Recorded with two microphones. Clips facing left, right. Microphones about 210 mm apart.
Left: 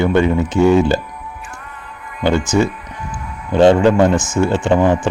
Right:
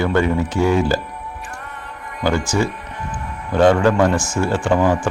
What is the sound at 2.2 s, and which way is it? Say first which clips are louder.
Speech: left 4 dB; 20° left (ahead or behind).